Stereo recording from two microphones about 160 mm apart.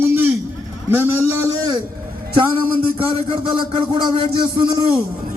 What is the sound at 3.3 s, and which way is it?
A man's voice, 30° right (ahead or behind).